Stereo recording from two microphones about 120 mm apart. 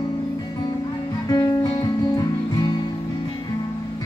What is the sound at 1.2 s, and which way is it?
Music, 30° left (ahead or behind).